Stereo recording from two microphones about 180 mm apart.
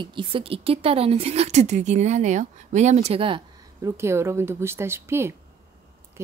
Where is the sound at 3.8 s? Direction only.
15° right (ahead or behind).